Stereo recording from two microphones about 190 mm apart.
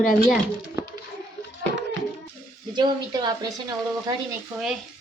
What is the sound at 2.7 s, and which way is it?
A woman's voice, 25° right (ahead or behind).